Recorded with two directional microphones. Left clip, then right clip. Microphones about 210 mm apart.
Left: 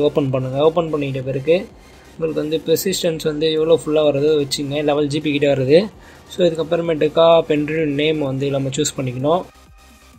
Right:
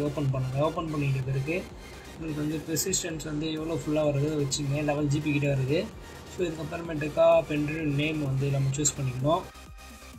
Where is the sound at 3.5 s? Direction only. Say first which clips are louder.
Left 13 dB; 55° left (ahead or behind).